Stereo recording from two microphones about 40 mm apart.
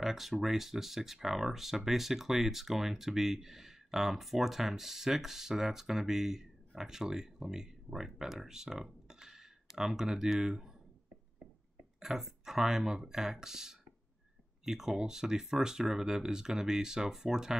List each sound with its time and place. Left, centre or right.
0.0 s speech: centre
9.0 s cutlery: centre
10.3 s speech: centre
12.0 s speech: centre